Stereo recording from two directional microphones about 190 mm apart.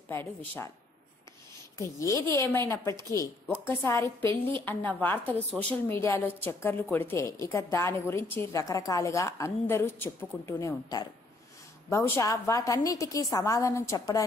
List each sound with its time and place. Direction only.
0.1 s a woman's voice: 10° left (ahead or behind)
1.8 s a woman's voice: 15° left (ahead or behind)